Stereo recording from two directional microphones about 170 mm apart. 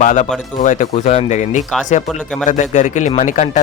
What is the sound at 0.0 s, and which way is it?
Speech, 50° left (ahead or behind).